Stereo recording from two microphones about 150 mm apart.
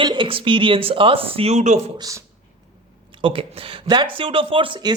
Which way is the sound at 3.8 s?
30° right (ahead or behind).